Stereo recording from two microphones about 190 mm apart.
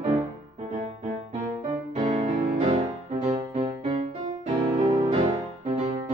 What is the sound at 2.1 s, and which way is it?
Music, 40° right (ahead or behind).